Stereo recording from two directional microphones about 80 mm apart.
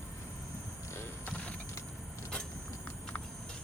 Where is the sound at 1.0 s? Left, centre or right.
Left.